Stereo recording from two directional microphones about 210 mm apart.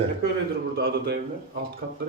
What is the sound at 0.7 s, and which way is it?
Speech, 45° right (ahead or behind).